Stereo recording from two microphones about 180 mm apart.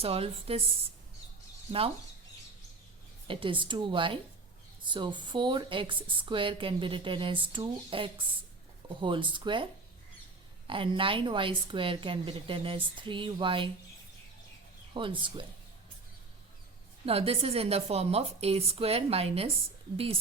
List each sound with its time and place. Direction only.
0.0 s a woman's voice: 35° right (ahead or behind)
3.2 s a woman's voice: 30° right (ahead or behind)
10.7 s a woman's voice: 30° right (ahead or behind)
14.9 s a woman's voice: 30° right (ahead or behind)
17.1 s a woman's voice: 35° right (ahead or behind)